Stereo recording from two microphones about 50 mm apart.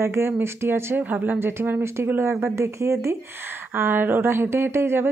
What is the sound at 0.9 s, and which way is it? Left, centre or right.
Speech, right.